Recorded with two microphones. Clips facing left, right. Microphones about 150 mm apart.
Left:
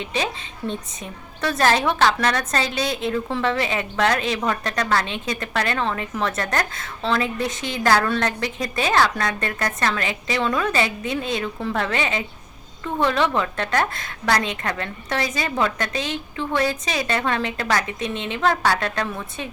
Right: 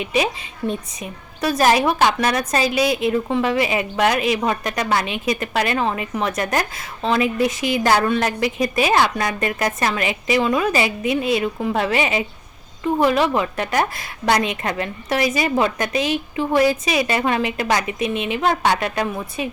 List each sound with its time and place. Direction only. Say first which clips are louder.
0.0 s a woman's voice: right 5 dB; 15° right (ahead or behind)